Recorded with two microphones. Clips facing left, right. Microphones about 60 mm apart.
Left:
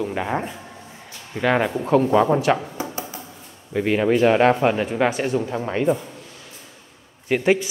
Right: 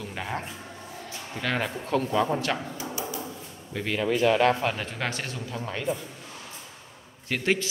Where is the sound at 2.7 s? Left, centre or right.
Left.